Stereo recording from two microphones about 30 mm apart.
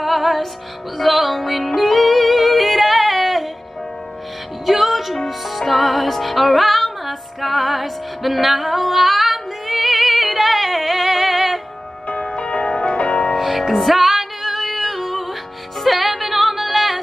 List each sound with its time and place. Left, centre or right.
0.0 s music: centre
4.6 s music: centre
12.2 s change ringing: left
13.4 s music: centre